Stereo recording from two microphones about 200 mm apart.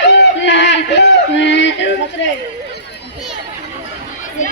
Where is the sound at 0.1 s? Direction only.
60° left (ahead or behind).